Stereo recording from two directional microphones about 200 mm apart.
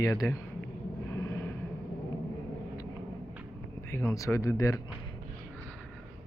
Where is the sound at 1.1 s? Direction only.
15° left (ahead or behind).